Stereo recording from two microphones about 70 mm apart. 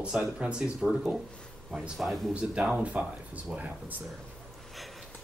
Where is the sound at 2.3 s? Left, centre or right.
Centre.